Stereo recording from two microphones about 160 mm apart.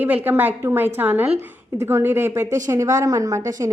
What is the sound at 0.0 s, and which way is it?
A woman's voice, 10° right (ahead or behind).